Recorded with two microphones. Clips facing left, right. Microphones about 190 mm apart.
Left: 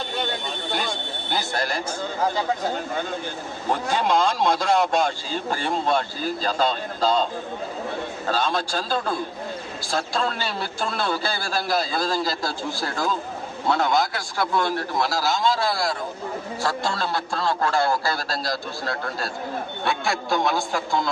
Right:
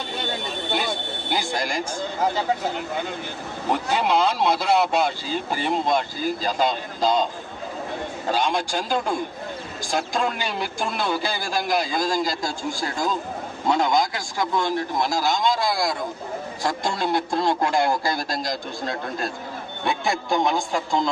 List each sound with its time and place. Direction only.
1.3 s speech: 10° right (ahead or behind)
3.7 s speech: 10° right (ahead or behind)
8.3 s speech: 15° right (ahead or behind)
13.7 s speech: 15° right (ahead or behind)